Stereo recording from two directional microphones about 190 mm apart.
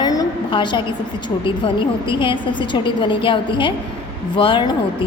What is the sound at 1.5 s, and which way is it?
A woman's voice, 25° left (ahead or behind).